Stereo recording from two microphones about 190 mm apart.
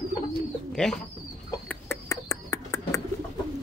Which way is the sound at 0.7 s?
5° left (ahead or behind).